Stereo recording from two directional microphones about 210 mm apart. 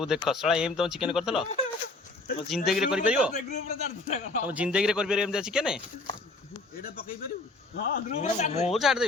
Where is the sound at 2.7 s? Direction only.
Centre (ahead or behind).